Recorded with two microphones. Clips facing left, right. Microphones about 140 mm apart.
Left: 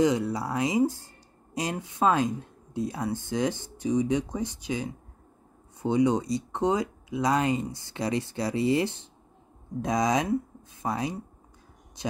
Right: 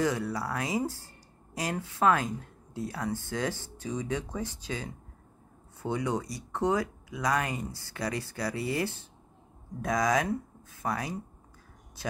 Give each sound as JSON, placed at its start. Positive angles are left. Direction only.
{"t": 0.0, "sound": "speech", "side_deg": 20}